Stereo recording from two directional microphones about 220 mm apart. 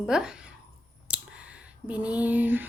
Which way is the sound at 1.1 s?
5° right (ahead or behind).